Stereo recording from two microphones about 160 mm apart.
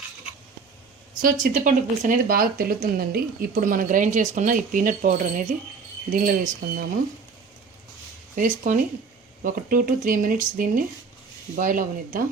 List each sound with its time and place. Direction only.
1.2 s speech: 60° right (ahead or behind)
8.4 s speech: 55° right (ahead or behind)